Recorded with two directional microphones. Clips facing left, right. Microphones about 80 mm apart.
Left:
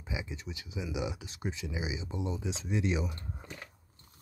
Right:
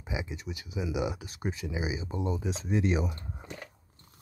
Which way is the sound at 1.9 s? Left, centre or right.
Right.